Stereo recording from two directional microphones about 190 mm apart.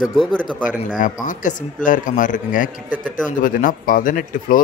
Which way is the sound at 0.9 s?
45° left (ahead or behind).